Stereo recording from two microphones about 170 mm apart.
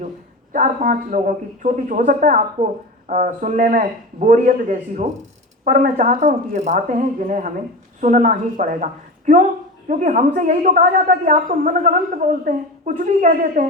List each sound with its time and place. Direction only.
0.5 s a woman's voice: 50° right (ahead or behind)